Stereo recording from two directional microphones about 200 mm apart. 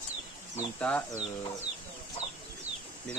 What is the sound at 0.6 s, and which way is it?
Speech, 5° left (ahead or behind).